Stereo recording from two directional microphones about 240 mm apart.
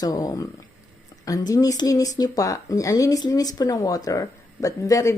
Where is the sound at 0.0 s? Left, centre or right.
Centre.